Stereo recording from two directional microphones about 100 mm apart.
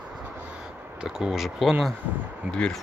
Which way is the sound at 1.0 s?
5° right (ahead or behind).